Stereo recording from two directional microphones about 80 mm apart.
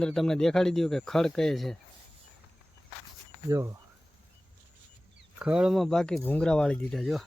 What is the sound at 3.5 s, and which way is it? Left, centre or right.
Speech, right.